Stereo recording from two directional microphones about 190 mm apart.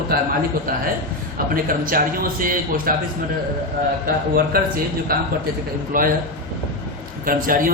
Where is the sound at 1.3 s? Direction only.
50° right (ahead or behind).